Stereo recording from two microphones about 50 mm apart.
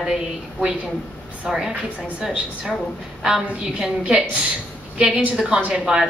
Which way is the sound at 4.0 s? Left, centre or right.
Right.